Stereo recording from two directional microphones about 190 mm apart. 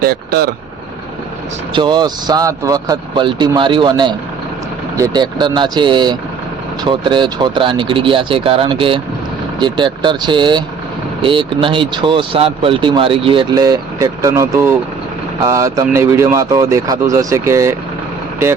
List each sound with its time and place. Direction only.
0.0 s speech: 55° right (ahead or behind)
1.7 s speech: 25° right (ahead or behind)